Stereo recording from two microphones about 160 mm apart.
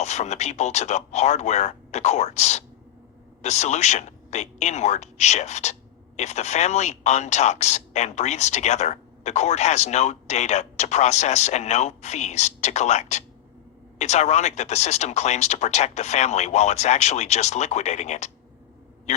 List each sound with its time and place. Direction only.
0.0 s a man's voice: 45° left (ahead or behind)